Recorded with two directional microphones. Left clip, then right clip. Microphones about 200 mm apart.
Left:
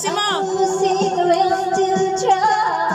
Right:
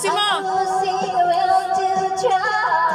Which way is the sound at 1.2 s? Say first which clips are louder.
Even; 35° left (ahead or behind).